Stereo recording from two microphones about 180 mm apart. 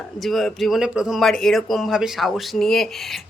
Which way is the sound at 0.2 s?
Centre (ahead or behind).